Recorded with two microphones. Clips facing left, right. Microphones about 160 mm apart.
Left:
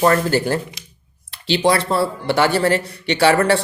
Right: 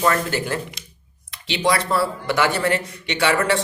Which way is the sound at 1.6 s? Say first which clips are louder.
Left 2 dB; 30° left (ahead or behind).